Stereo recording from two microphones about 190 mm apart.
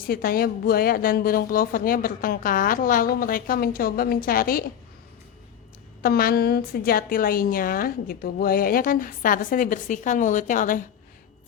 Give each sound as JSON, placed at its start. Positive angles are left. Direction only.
{"t": 0.0, "sound": "a woman's voice", "side_deg": 50}
{"t": 6.0, "sound": "a woman's voice", "side_deg": 50}